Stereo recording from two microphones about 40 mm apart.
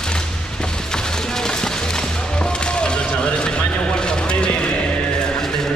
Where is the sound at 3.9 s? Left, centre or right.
Left.